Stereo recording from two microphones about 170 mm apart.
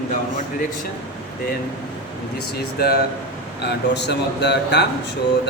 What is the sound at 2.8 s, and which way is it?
Speech, 65° left (ahead or behind).